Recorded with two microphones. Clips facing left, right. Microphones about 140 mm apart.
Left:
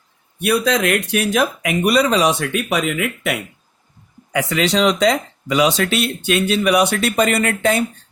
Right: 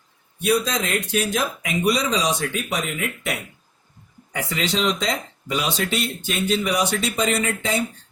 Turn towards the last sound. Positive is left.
turn(degrees=65)  # may be behind; listen again after turning